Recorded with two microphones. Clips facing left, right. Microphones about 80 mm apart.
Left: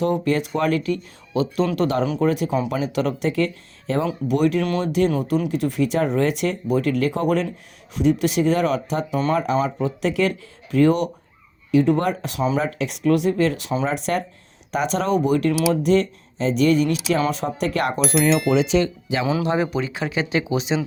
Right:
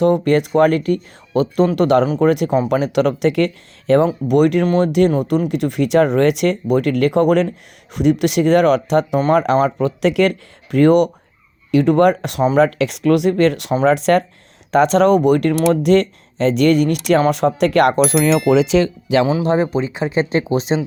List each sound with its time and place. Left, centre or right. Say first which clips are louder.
0.0 s speech: right 6 dB; right
4.3 s speech: right 4 dB; right
5.1 s speech: right 4 dB; right
11.7 s speech: right 6 dB; right
12.5 s speech: right 9 dB; right
13.8 s speech: right 12 dB; right
15.7 s speech: right 5 dB; right
18.3 s speech: right 4 dB; centre
18.7 s speech: right 4 dB; right
19.2 s speech: right 3 dB; right